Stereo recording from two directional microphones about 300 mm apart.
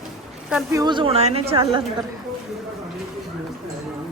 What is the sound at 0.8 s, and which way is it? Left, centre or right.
A woman's voice, centre.